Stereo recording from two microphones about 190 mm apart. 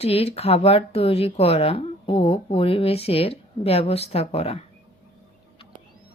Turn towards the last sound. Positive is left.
turn(degrees=30)  # may be behind; listen again after turning